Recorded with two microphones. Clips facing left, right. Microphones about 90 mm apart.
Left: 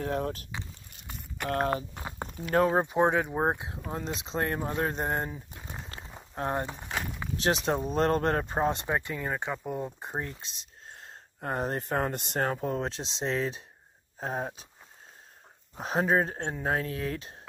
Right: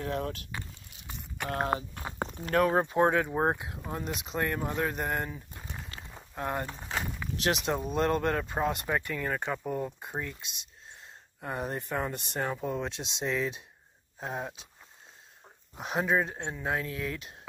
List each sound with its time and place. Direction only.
0.0 s speech: 35° left (ahead or behind)
0.6 s a sound: centre (ahead or behind)
1.5 s speech: 20° right (ahead or behind)
2.5 s speech: 20° left (ahead or behind)
4.6 s speech: 20° left (ahead or behind)
4.8 s speech: 30° left (ahead or behind)
5.9 s a sound: 5° left (ahead or behind)
6.3 s speech: 30° left (ahead or behind)
6.7 s walk: 5° left (ahead or behind)
7.4 s speech: 30° left (ahead or behind); by 9.9 s 15° left (ahead or behind)
9.9 s speech: 30° left (ahead or behind); by 12.5 s 50° left (ahead or behind)
12.6 s speech: 35° left (ahead or behind)
15.8 s speech: 35° left (ahead or behind)